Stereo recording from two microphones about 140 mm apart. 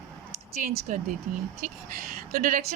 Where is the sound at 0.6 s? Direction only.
70° right (ahead or behind).